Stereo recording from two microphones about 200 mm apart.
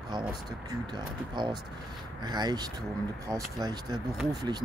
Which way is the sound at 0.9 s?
20° right (ahead or behind).